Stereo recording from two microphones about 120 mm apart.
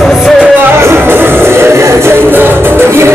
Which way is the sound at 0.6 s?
20° right (ahead or behind).